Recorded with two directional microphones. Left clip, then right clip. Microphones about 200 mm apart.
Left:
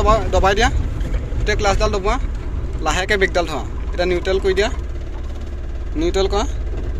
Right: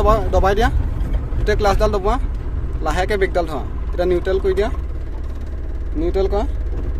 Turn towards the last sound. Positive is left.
turn(degrees=-10)  # may be behind; listen again after turning